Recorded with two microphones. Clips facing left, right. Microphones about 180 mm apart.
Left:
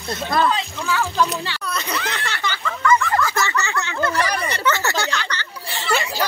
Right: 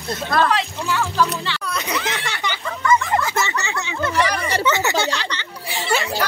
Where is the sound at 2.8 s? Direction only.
20° right (ahead or behind).